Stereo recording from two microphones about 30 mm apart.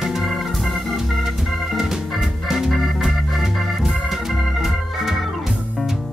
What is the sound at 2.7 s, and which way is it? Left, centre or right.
Music, centre.